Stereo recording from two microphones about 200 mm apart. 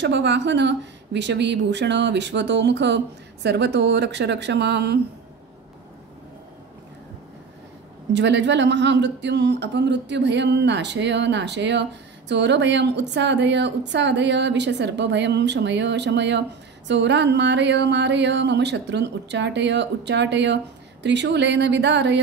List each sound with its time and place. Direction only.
0.0 s a woman's voice: 60° right (ahead or behind)
8.1 s a woman's voice: 60° right (ahead or behind)